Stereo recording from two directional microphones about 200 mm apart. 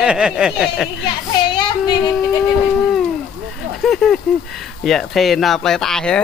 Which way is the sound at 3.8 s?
Centre (ahead or behind).